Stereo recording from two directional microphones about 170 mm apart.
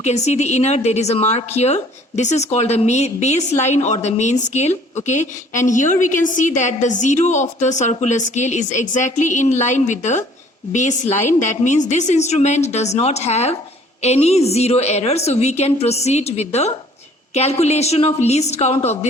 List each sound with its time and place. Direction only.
0.0 s a woman's voice: 45° left (ahead or behind)